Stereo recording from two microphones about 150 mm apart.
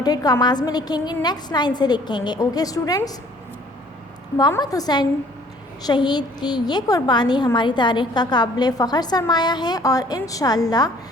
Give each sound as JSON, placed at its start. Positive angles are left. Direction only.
{"t": 0.0, "sound": "a woman's voice", "side_deg": 25}
{"t": 4.4, "sound": "a woman's voice", "side_deg": 25}